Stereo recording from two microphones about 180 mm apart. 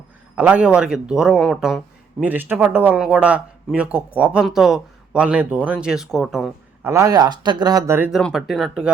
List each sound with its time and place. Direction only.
0.3 s a man's voice: 5° right (ahead or behind)
6.9 s speech: 20° right (ahead or behind)
8.2 s a man's voice: centre (ahead or behind)